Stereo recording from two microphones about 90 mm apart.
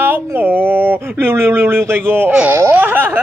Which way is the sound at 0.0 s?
25° right (ahead or behind).